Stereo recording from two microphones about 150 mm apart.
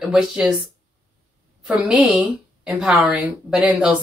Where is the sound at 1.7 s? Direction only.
10° right (ahead or behind).